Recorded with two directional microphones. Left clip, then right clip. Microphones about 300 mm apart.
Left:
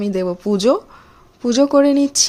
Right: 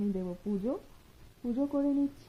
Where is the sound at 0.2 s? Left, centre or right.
Left.